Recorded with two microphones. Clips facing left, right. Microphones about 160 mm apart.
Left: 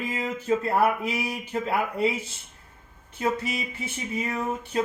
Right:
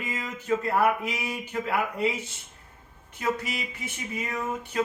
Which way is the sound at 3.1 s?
30° left (ahead or behind).